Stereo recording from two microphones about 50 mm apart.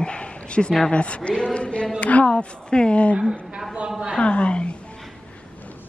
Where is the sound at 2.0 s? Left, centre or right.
Left.